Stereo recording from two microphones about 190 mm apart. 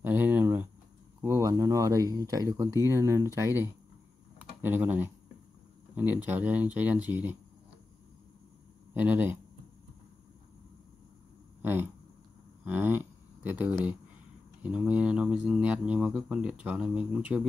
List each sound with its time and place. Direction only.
0.0 s a sound: 10° right (ahead or behind)
1.2 s speech: 15° right (ahead or behind)
6.2 s speech: 10° right (ahead or behind)
8.9 s speech: 10° right (ahead or behind)
11.6 s speech: 10° right (ahead or behind)